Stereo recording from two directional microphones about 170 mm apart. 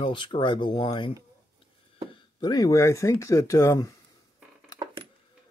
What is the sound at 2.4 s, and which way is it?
Speech, 20° left (ahead or behind).